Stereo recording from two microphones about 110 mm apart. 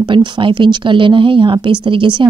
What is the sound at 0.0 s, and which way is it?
Speech, 45° right (ahead or behind).